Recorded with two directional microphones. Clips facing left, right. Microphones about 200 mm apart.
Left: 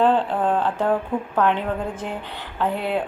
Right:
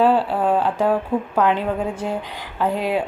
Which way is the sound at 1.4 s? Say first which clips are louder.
Right 1 dB; 10° right (ahead or behind).